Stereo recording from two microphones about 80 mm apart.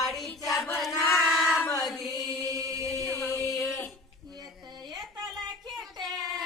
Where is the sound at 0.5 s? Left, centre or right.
Left.